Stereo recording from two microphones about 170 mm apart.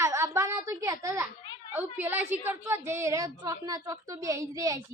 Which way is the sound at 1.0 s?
15° right (ahead or behind).